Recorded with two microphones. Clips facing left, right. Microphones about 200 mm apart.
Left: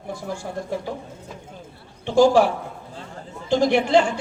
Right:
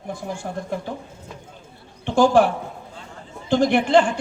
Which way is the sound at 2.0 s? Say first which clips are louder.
Left 1 dB; 55° right (ahead or behind).